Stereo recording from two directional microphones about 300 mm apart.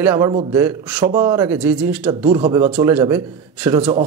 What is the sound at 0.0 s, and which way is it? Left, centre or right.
Speech, centre.